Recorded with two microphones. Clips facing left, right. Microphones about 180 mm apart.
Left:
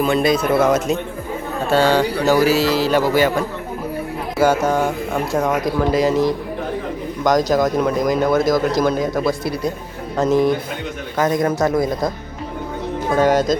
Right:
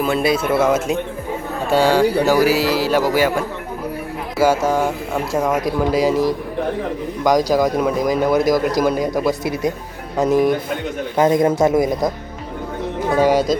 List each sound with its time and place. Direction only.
0.0 s speech: 5° right (ahead or behind)
11.2 s speech: 25° right (ahead or behind)
13.1 s speech: 10° right (ahead or behind)